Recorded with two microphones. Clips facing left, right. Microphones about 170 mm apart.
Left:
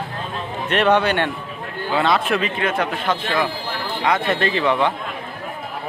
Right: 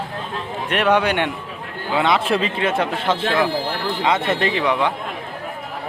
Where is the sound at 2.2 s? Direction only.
30° right (ahead or behind); by 4.9 s 10° right (ahead or behind).